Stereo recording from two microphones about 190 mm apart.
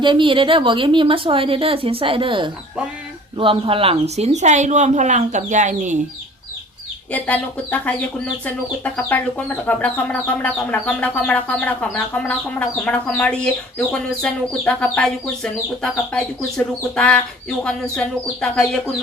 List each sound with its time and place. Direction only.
0.0 s a woman's voice: 25° right (ahead or behind)
7.1 s speech: 10° left (ahead or behind)
9.6 s speech: 10° left (ahead or behind)